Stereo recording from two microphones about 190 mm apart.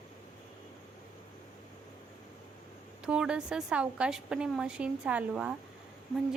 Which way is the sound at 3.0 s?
5° right (ahead or behind).